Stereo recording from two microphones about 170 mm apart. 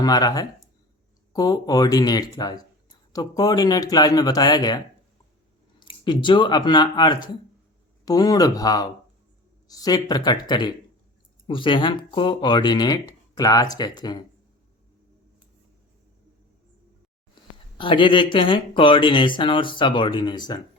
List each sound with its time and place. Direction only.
0.0 s speech: 20° left (ahead or behind)
5.8 s a sound: 30° left (ahead or behind)
6.2 s speech: 25° left (ahead or behind)
17.7 s speech: 30° left (ahead or behind)